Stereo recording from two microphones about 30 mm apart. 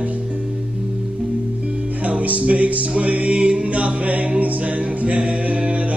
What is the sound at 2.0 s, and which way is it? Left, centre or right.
Music, right.